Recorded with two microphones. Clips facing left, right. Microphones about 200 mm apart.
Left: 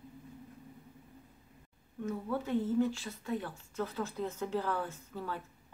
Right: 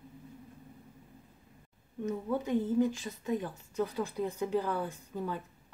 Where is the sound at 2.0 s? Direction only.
20° right (ahead or behind).